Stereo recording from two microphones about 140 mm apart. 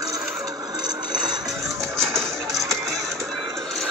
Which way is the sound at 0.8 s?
30° right (ahead or behind).